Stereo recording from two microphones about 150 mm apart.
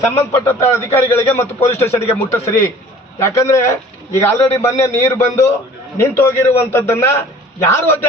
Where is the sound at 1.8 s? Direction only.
45° left (ahead or behind).